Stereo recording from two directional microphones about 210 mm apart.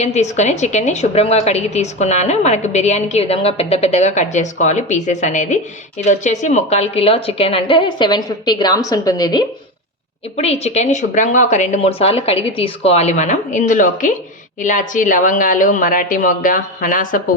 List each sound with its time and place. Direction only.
0.0 s a woman's voice: 35° left (ahead or behind); by 9.4 s 15° left (ahead or behind)
10.3 s a woman's voice: 30° left (ahead or behind)